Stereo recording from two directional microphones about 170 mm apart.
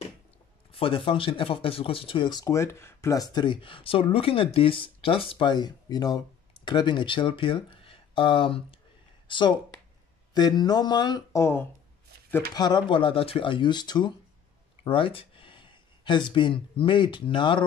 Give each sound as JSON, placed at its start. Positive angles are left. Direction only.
{"t": 0.7, "sound": "speech", "side_deg": 30}
{"t": 12.5, "sound": "speech", "side_deg": 25}